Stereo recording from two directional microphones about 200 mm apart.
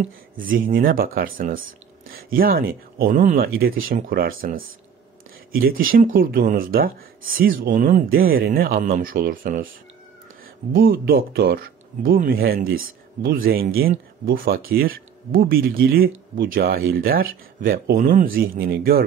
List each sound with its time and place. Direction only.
0.0 s speech: 45° right (ahead or behind)
5.5 s speech: 45° right (ahead or behind)
10.7 s speech: 50° right (ahead or behind)